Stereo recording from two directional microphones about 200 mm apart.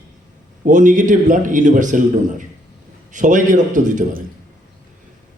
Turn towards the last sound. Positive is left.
turn(degrees=-40)  # may be behind; listen again after turning